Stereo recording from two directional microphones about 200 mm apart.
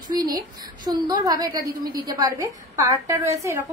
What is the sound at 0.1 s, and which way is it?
A woman's voice, 20° right (ahead or behind).